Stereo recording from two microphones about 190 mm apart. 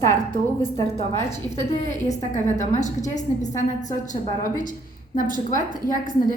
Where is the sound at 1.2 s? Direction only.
35° left (ahead or behind).